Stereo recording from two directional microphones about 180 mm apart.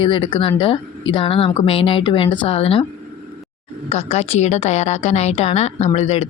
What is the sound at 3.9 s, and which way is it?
Speech, 35° left (ahead or behind).